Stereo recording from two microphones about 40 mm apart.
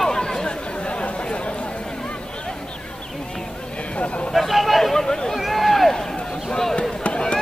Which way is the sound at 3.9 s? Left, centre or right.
Left.